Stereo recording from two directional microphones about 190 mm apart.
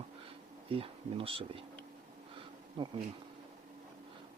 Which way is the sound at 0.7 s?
30° right (ahead or behind).